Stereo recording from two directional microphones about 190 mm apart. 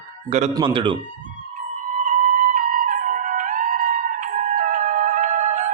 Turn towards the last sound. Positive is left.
turn(degrees=-40)  # may be behind; listen again after turning